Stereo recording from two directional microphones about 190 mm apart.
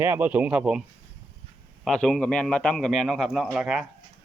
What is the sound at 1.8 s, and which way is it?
A man's voice, 5° left (ahead or behind).